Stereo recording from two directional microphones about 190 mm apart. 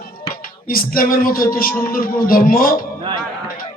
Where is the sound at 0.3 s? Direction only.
50° left (ahead or behind).